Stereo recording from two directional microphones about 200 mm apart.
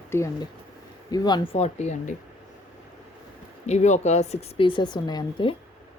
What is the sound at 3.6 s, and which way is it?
A woman's voice, 35° left (ahead or behind).